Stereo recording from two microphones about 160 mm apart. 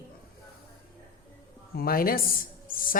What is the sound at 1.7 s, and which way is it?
Speech, 65° left (ahead or behind).